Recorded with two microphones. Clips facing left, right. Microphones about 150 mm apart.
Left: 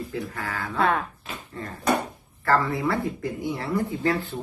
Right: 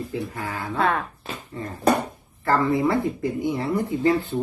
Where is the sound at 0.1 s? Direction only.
20° right (ahead or behind).